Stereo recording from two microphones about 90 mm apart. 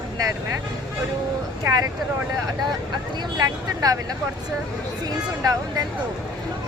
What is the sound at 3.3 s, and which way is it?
Speech, 40° right (ahead or behind).